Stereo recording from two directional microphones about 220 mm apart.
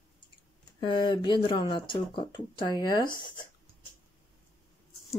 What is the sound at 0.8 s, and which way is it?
Speech, 20° left (ahead or behind).